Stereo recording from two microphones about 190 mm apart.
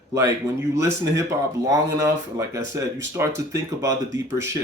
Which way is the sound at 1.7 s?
15° right (ahead or behind).